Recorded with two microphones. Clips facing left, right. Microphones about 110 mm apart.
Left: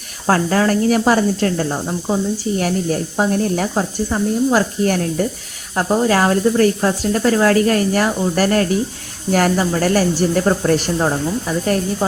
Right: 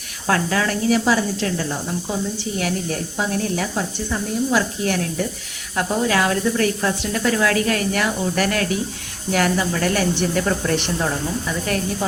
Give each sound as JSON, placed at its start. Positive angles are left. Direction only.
{"t": 0.3, "sound": "speech", "side_deg": 35}